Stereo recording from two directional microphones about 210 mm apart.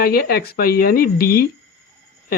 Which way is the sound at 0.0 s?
45° left (ahead or behind).